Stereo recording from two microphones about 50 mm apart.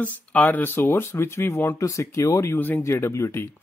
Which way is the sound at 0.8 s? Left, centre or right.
Left.